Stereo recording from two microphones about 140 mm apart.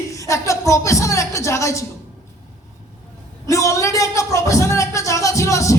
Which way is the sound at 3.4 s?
20° left (ahead or behind).